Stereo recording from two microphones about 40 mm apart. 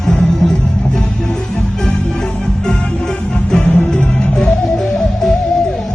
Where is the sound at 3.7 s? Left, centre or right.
Left.